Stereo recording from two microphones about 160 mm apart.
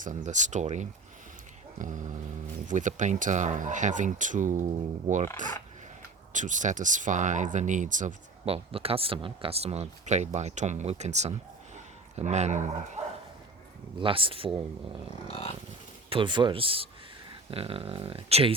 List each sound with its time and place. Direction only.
0.0 s speech: 50° right (ahead or behind)
6.3 s speech: 50° right (ahead or behind)
8.4 s speech: 40° right (ahead or behind)
14.0 s speech: 35° right (ahead or behind)
15.3 s speech: 40° left (ahead or behind)
16.0 s speech: 30° right (ahead or behind)